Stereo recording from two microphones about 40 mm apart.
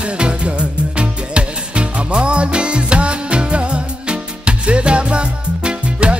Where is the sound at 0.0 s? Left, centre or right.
Right.